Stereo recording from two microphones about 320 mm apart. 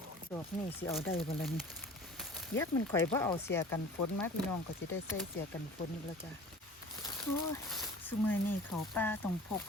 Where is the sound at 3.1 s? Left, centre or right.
Centre.